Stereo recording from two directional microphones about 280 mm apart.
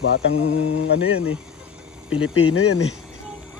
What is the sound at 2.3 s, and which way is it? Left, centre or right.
Mantra, left.